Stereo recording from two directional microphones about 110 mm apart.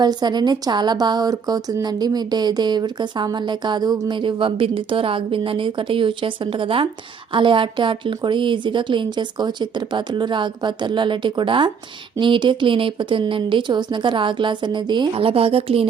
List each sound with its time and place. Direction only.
0.0 s speech: 40° right (ahead or behind); by 15.9 s 60° right (ahead or behind)